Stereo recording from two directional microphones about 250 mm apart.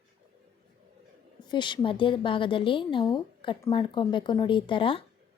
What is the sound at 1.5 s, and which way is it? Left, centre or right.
A woman's voice, centre.